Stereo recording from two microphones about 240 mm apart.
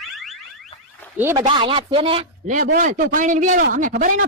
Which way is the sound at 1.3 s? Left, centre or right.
Right.